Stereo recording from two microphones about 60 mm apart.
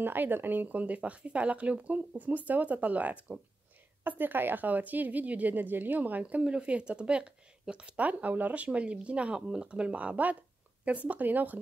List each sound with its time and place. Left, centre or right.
0.0 s speech: right